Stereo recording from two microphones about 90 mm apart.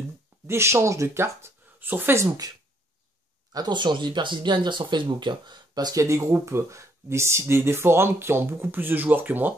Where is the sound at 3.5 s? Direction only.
55° right (ahead or behind).